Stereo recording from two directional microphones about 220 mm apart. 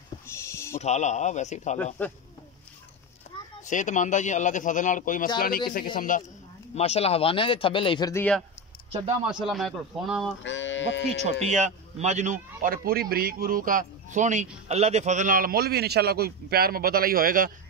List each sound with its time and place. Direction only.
0.3 s a sound: 10° left (ahead or behind)
0.7 s a man's voice: 30° left (ahead or behind)
2.0 s speech: 10° left (ahead or behind)
3.3 s a sound: 30° left (ahead or behind)
3.6 s a man's voice: 35° left (ahead or behind); by 8.4 s 10° left (ahead or behind)
9.3 s speech: centre (ahead or behind)
10.4 s music: 55° left (ahead or behind)
11.2 s a man's voice: 30° right (ahead or behind)